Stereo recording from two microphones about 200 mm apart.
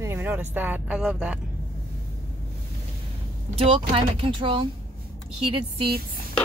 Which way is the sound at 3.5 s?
25° right (ahead or behind).